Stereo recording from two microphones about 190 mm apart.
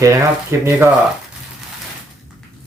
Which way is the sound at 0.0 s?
15° right (ahead or behind).